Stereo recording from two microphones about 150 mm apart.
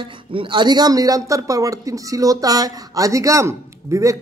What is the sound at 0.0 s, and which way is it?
Speech, 35° right (ahead or behind).